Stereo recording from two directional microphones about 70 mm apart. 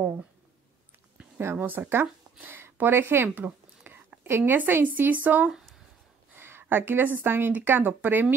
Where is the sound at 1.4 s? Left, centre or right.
Right.